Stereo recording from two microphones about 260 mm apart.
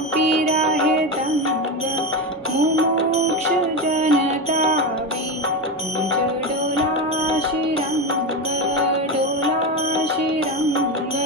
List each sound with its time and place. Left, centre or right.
3.9 s music: right